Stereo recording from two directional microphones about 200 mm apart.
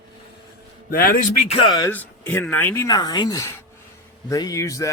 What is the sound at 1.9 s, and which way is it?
Speech, 10° left (ahead or behind).